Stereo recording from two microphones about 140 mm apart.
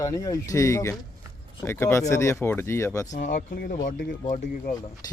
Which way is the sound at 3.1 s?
75° left (ahead or behind).